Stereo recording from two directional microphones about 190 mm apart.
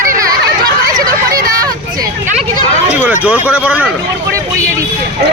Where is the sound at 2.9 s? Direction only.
10° right (ahead or behind).